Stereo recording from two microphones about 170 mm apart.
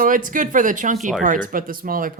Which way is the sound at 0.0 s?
55° right (ahead or behind).